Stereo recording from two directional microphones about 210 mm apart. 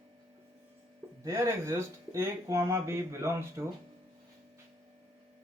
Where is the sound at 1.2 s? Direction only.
15° right (ahead or behind).